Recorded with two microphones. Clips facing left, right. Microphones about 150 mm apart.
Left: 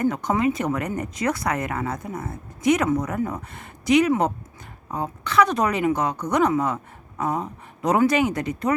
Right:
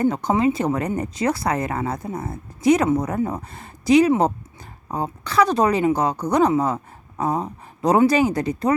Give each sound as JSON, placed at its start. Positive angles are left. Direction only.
{"t": 0.0, "sound": "speech", "side_deg": -30}